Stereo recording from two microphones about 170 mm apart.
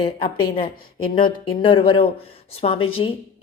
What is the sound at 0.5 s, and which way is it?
A woman's voice, 30° left (ahead or behind).